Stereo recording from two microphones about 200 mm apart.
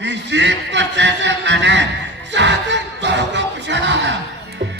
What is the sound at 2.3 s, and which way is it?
Music, 60° right (ahead or behind).